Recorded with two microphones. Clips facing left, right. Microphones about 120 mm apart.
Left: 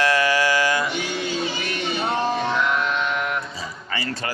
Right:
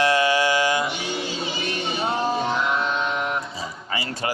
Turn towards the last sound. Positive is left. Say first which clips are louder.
# left 1 dB
turn(degrees=-30)  # may be behind; listen again after turning